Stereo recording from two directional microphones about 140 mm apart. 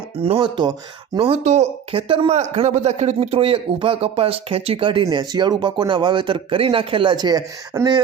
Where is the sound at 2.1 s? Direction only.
45° right (ahead or behind).